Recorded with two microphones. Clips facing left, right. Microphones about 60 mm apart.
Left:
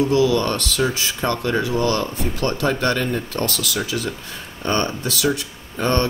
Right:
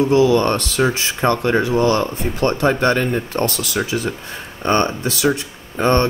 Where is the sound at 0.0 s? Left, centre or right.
Right.